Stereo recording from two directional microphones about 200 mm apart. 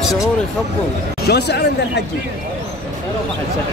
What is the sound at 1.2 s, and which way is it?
Speech, 55° left (ahead or behind).